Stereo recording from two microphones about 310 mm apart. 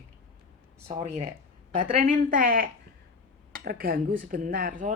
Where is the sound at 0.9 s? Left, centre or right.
Right.